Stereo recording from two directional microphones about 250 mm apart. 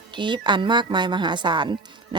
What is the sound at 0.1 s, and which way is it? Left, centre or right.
A woman's voice, centre.